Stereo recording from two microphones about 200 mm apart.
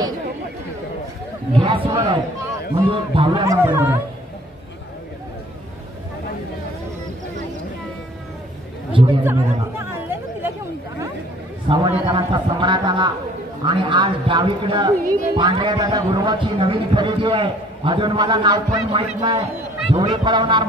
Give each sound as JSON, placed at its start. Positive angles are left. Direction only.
{"t": 1.6, "sound": "a woman's voice", "side_deg": -25}
{"t": 3.5, "sound": "speech", "side_deg": -10}
{"t": 8.9, "sound": "chatter", "side_deg": -25}
{"t": 9.2, "sound": "chatter", "side_deg": -10}
{"t": 11.7, "sound": "a man's voice", "side_deg": -30}
{"t": 12.1, "sound": "a sound", "side_deg": -25}
{"t": 13.7, "sound": "a woman's voice", "side_deg": -25}